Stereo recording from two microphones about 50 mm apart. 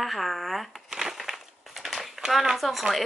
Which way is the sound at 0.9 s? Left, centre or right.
Centre.